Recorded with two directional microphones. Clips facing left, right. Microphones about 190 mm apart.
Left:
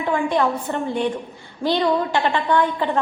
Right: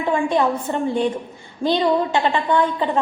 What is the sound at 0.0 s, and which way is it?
A woman's voice, 20° right (ahead or behind).